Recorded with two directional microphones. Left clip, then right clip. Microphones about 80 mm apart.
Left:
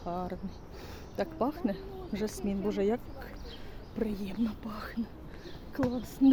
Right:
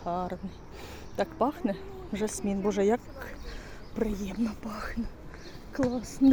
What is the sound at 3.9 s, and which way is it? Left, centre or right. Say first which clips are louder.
Speech: right 3 dB; centre.